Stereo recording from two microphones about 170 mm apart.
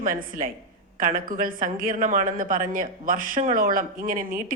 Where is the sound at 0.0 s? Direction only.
55° right (ahead or behind).